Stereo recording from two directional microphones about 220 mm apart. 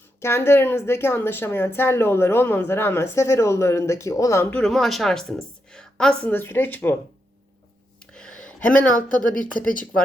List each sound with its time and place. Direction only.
0.2 s speech: 10° left (ahead or behind)
7.9 s a sound: 5° left (ahead or behind)
9.0 s speech: 35° left (ahead or behind)